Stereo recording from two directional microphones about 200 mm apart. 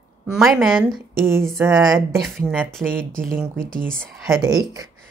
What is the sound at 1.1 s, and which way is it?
Speech, 10° right (ahead or behind).